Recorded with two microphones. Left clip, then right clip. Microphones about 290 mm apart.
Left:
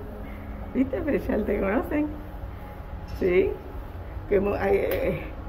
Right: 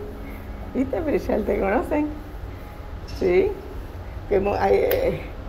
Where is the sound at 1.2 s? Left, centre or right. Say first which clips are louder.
Right 4 dB; centre.